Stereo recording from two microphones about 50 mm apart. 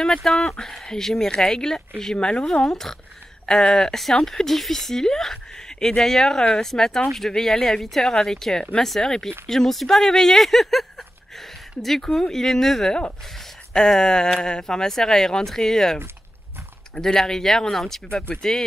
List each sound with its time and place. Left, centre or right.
0.0 s speech: centre